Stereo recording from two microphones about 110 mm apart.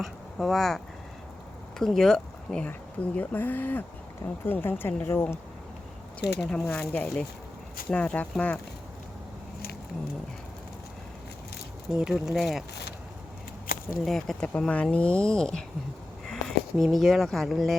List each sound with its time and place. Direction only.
0.0 s speech: centre (ahead or behind)
1.8 s speech: 5° left (ahead or behind)
6.1 s speech: 10° left (ahead or behind)
11.9 s speech: 5° right (ahead or behind)
14.0 s speech: centre (ahead or behind)